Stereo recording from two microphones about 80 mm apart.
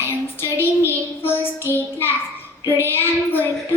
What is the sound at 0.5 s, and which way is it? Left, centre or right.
Child singing, left.